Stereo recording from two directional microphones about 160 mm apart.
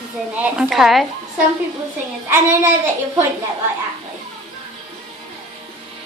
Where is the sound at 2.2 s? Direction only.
15° right (ahead or behind).